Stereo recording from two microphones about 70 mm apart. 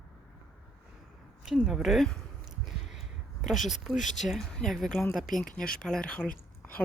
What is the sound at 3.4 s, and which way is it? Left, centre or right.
A woman's voice, centre.